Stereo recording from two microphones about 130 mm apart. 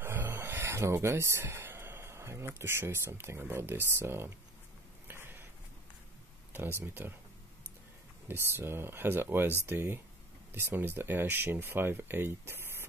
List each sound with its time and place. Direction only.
0.0 s speech: 15° right (ahead or behind)
5.0 s a sound: 15° right (ahead or behind)
6.5 s speech: 15° right (ahead or behind)
8.3 s speech: 20° right (ahead or behind)